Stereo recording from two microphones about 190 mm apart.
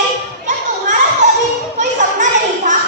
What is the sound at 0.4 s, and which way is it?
Children playing, 40° right (ahead or behind).